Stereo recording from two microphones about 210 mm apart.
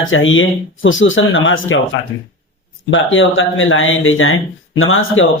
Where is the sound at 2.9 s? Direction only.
65° left (ahead or behind).